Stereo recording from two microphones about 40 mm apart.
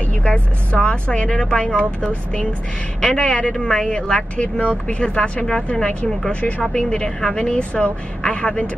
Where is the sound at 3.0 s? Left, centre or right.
Left.